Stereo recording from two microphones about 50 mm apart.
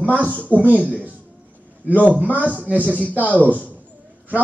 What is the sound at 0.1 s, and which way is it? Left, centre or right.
Speech, right.